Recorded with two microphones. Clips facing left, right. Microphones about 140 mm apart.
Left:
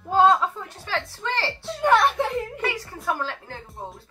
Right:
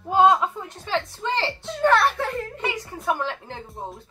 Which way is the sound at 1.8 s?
15° left (ahead or behind).